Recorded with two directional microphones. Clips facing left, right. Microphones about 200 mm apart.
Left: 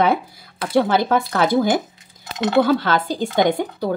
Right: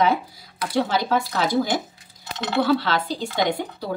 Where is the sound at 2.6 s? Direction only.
50° left (ahead or behind).